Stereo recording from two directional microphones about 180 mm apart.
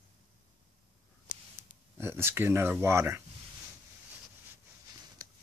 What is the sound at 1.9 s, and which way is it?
Speech, 15° right (ahead or behind).